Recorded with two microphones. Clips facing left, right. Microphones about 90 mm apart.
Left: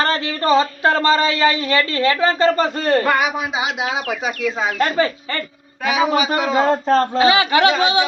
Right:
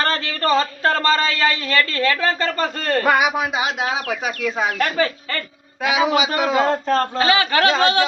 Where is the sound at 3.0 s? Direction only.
10° right (ahead or behind).